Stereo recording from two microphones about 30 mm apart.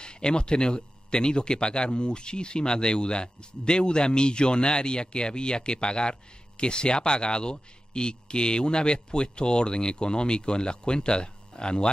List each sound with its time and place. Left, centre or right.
0.0 s speech: left